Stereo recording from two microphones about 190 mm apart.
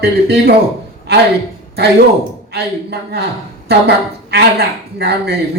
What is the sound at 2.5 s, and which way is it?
A man's voice, 55° right (ahead or behind).